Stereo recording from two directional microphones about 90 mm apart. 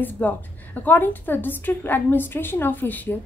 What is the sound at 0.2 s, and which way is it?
A woman's voice, 20° left (ahead or behind).